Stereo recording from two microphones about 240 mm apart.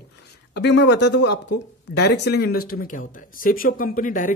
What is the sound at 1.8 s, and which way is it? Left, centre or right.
Speech, left.